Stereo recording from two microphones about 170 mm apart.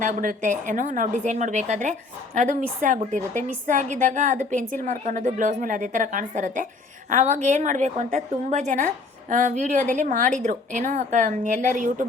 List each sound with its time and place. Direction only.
0.0 s a woman's voice: 50° right (ahead or behind)